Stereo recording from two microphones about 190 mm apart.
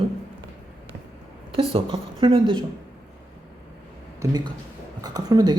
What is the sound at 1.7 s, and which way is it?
Speech, 30° right (ahead or behind).